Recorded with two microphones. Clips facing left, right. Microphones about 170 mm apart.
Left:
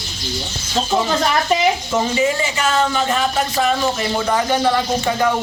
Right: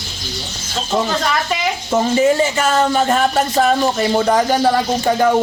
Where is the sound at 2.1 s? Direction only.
40° right (ahead or behind).